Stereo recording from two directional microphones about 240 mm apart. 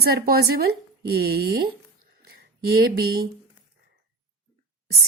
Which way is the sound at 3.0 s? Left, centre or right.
Right.